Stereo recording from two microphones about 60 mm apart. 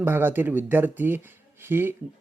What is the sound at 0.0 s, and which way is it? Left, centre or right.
Speech, right.